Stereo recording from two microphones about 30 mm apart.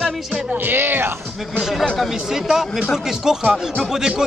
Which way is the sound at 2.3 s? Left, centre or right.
Centre.